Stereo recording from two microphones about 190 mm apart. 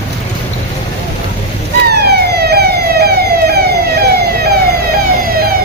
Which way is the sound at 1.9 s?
55° right (ahead or behind).